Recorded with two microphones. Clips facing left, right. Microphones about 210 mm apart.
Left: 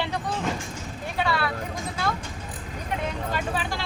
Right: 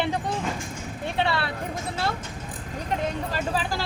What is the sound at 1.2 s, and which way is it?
Speech, 25° right (ahead or behind).